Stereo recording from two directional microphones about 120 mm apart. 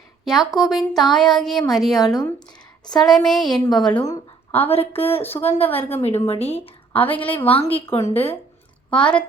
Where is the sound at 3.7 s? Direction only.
10° left (ahead or behind).